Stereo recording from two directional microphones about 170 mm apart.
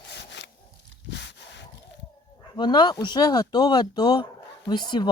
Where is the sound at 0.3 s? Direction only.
90° left.